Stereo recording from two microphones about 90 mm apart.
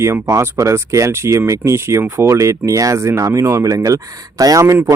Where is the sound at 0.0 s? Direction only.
35° right (ahead or behind).